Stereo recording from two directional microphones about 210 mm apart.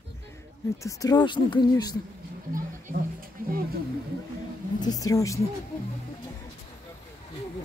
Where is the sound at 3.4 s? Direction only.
40° right (ahead or behind).